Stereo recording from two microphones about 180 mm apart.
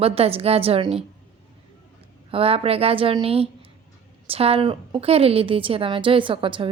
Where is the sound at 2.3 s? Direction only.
30° right (ahead or behind).